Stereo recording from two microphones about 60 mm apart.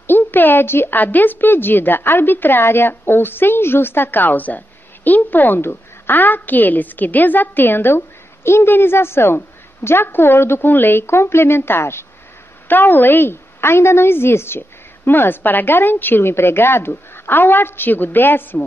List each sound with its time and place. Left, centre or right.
0.0 s a woman's voice: left
12.6 s a woman's voice: left